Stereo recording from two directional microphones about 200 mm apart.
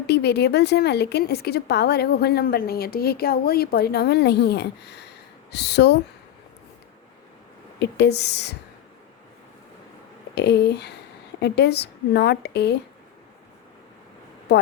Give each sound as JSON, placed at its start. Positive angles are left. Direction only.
{"t": 0.1, "sound": "speech", "side_deg": 55}
{"t": 7.8, "sound": "speech", "side_deg": 55}
{"t": 10.3, "sound": "speech", "side_deg": 55}